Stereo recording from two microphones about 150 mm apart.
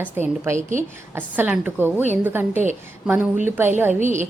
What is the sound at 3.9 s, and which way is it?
Speech, 55° right (ahead or behind).